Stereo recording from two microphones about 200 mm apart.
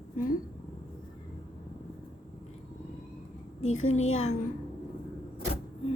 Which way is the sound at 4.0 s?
35° left (ahead or behind).